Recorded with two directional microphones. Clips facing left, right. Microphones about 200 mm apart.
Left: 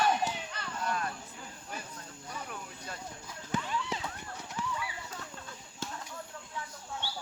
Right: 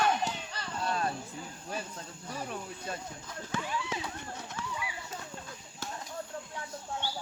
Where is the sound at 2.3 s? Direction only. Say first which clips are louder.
Right 5 dB; 30° right (ahead or behind).